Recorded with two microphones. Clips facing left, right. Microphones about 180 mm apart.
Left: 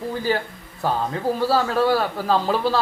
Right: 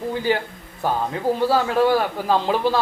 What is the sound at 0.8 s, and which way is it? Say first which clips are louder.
A man's voice: even; 15° right (ahead or behind).